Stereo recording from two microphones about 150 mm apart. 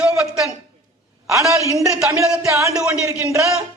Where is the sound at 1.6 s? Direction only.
20° left (ahead or behind).